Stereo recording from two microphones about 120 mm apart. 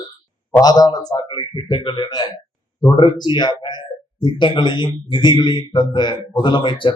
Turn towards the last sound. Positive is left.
turn(degrees=40)  # may be behind; listen again after turning